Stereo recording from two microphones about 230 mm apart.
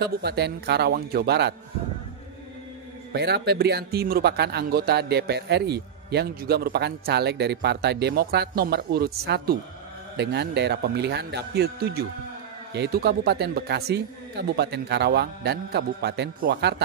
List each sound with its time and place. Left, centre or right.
0.0 s speech: right
3.1 s speech: right